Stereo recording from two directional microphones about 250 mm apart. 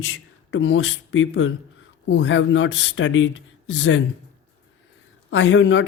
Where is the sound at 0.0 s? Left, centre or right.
Left.